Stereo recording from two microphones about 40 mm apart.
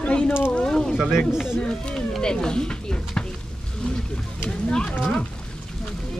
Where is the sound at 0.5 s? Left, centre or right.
Centre.